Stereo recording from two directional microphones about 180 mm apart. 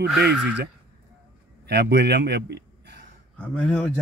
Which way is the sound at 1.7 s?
70° right (ahead or behind).